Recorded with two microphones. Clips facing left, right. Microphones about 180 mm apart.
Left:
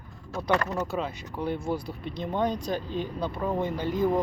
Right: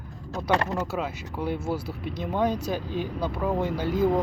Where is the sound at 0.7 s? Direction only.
5° right (ahead or behind).